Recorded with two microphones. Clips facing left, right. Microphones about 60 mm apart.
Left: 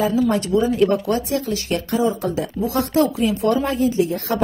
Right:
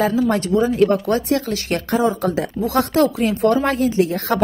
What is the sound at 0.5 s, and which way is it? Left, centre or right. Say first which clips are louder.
Speech: right 1 dB; right.